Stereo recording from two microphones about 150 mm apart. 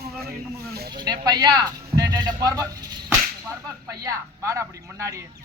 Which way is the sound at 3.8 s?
20° right (ahead or behind).